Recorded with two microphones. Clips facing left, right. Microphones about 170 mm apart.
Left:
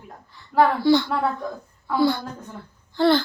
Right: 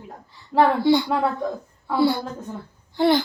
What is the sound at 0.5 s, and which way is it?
Speech, 20° right (ahead or behind).